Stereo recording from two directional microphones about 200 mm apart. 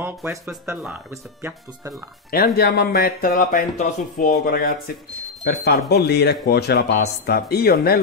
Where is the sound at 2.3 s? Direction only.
50° left (ahead or behind).